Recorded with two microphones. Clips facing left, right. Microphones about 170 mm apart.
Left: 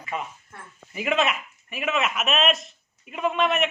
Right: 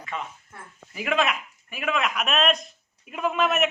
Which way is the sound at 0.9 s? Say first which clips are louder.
Left 1 dB; centre (ahead or behind).